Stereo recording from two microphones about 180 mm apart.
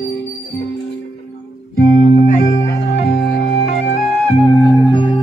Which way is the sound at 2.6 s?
80° left.